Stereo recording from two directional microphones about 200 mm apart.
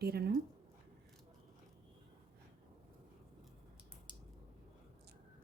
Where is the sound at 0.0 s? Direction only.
50° right (ahead or behind).